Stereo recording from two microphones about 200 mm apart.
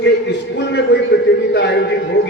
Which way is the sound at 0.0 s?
60° left (ahead or behind).